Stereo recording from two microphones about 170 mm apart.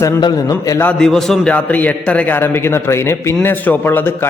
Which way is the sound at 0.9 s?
5° left (ahead or behind).